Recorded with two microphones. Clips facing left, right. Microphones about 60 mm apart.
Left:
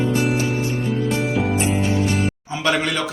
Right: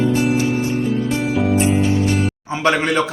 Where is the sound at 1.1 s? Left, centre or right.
Centre.